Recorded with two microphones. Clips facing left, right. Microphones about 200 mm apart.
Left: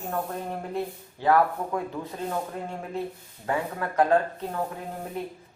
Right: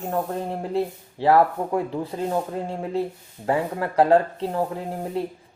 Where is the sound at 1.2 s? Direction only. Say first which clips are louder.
Right 4 dB; 30° right (ahead or behind).